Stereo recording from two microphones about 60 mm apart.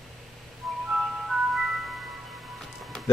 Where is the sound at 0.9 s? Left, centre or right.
Centre.